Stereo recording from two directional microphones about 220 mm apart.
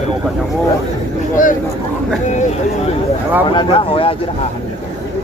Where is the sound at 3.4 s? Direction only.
20° left (ahead or behind).